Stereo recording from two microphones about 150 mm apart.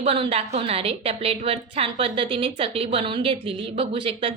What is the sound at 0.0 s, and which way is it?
A woman's voice, 40° right (ahead or behind).